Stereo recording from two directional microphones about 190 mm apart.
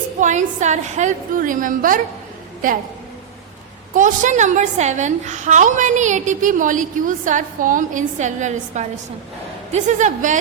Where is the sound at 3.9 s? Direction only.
45° right (ahead or behind).